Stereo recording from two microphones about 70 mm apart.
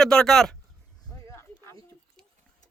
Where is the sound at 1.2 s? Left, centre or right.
Left.